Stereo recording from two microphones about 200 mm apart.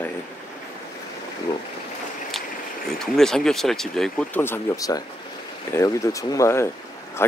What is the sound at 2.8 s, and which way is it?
Speech, centre (ahead or behind).